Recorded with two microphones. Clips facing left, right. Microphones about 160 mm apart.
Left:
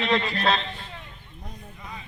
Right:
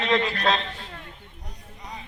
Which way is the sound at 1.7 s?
35° right (ahead or behind).